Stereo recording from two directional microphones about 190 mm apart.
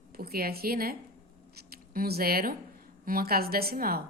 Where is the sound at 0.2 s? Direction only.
55° right (ahead or behind).